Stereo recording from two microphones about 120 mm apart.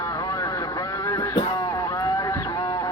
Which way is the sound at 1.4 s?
35° left (ahead or behind).